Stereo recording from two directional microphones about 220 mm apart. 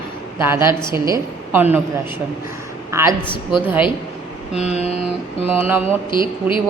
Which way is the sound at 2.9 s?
15° right (ahead or behind).